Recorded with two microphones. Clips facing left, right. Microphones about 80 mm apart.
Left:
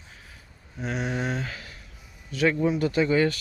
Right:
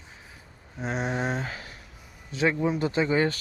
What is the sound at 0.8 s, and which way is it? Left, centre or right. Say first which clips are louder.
Speech: even; right.